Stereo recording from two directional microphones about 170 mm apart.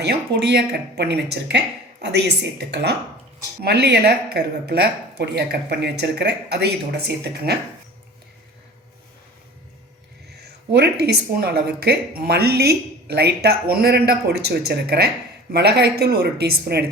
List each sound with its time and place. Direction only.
0.0 s speech: 75° right (ahead or behind); by 2.9 s 90° right
3.6 s a woman's voice: 70° right (ahead or behind)
10.2 s a woman's voice: 75° right (ahead or behind)